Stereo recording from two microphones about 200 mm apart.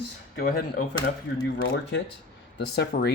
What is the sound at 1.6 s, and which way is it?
Speech, 60° left (ahead or behind).